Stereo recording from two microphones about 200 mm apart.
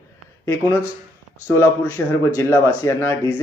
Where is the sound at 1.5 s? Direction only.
15° left (ahead or behind).